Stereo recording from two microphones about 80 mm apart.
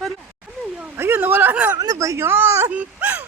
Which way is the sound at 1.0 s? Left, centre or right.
Right.